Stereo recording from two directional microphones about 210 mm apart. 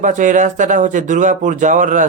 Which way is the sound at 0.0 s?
35° right (ahead or behind).